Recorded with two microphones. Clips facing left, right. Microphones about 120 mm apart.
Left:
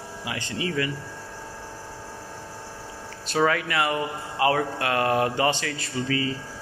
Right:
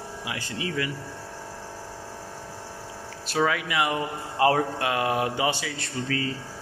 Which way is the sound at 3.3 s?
10° right (ahead or behind).